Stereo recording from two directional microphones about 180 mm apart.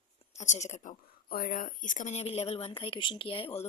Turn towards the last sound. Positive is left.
turn(degrees=30)  # may be behind; listen again after turning